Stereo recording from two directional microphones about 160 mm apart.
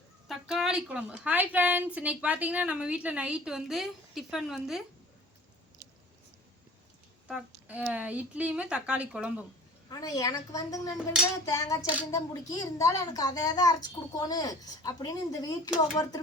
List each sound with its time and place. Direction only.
0.3 s a woman's voice: 5° right (ahead or behind)
7.3 s a woman's voice: 5° right (ahead or behind)
9.9 s a woman's voice: 20° left (ahead or behind)
10.9 s a sound: 5° right (ahead or behind)
11.4 s a woman's voice: 20° left (ahead or behind)